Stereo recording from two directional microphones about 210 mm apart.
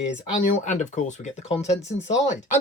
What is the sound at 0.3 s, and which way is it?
Speech, 35° left (ahead or behind).